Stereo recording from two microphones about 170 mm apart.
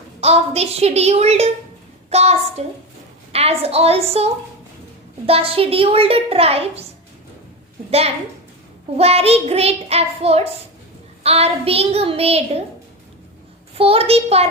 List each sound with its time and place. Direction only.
0.2 s a child's voice: 35° right (ahead or behind)
7.9 s a child's voice: 35° right (ahead or behind)
13.7 s a child's voice: 35° right (ahead or behind)